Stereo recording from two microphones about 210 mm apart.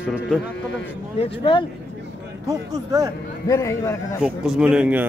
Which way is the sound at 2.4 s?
15° right (ahead or behind).